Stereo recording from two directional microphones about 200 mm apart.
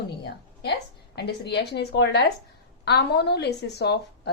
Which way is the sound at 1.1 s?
55° left (ahead or behind).